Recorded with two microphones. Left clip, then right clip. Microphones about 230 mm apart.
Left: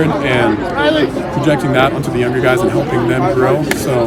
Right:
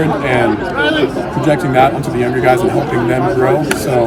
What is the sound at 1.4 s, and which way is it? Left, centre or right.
A man's voice, centre.